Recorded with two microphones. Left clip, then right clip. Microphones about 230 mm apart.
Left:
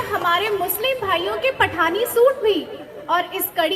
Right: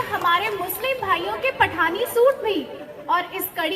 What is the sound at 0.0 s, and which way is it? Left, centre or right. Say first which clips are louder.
A woman's voice: left 1 dB; left.